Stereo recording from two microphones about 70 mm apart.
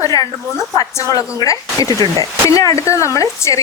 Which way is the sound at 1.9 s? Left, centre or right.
Right.